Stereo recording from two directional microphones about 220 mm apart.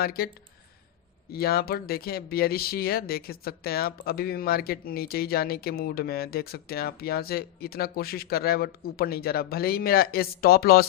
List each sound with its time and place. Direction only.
0.0 s speech: 45° left (ahead or behind)
1.3 s speech: 45° left (ahead or behind)